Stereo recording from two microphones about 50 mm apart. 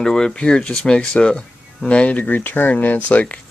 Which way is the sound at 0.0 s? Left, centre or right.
Centre.